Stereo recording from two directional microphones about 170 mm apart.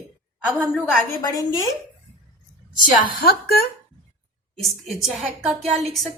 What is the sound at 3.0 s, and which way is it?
Speech, 65° left (ahead or behind).